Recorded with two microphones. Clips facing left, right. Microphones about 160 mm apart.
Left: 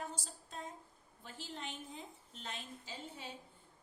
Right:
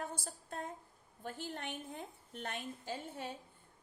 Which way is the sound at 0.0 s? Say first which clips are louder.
Right 2 dB; 55° right (ahead or behind).